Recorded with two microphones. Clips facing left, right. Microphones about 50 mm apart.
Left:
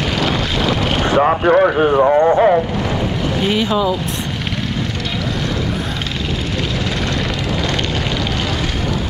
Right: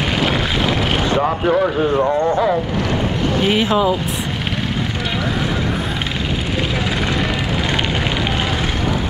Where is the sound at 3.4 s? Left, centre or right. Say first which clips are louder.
Right 1 dB; centre.